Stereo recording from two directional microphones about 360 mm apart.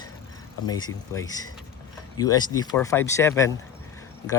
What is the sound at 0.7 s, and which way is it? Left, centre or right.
Speech, centre.